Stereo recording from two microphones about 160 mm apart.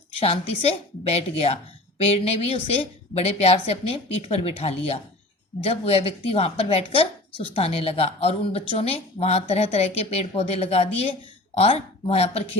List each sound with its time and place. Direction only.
0.2 s a woman's voice: 40° left (ahead or behind)